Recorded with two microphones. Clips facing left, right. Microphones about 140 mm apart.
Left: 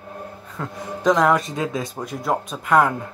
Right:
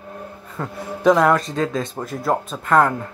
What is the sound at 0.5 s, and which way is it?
Speech, 5° right (ahead or behind).